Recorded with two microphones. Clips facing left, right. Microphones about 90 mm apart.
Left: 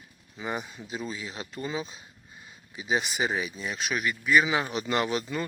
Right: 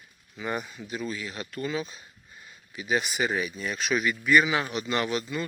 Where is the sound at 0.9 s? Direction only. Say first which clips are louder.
Right 2 dB; 25° left (ahead or behind).